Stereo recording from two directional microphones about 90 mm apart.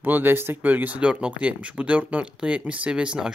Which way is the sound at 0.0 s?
20° right (ahead or behind).